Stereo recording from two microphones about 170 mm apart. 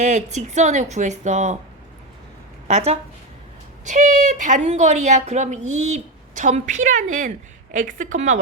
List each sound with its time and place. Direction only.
0.0 s a woman's voice: 45° right (ahead or behind)
2.6 s a woman's voice: 40° right (ahead or behind)